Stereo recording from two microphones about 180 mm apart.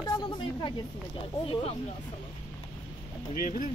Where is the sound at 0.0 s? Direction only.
25° left (ahead or behind).